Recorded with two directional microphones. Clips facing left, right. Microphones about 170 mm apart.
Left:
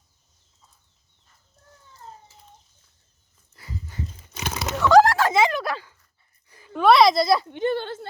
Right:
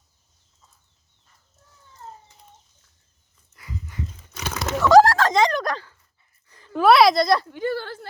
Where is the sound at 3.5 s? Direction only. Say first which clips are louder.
Right 1 dB; 30° left (ahead or behind).